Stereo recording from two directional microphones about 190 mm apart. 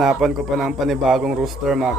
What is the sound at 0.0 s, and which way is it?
Speech, centre (ahead or behind).